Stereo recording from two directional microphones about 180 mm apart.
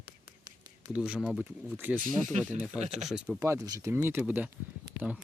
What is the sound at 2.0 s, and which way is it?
Speech, 45° right (ahead or behind).